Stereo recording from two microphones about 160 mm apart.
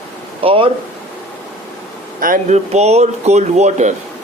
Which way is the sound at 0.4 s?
35° right (ahead or behind).